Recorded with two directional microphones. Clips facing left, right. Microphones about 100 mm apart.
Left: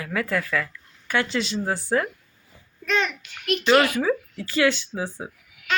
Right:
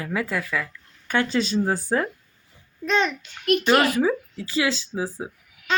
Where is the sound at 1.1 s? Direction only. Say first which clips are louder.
Right 2 dB; 35° right (ahead or behind).